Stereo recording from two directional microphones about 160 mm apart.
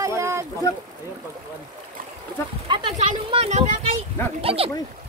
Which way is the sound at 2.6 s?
30° right (ahead or behind).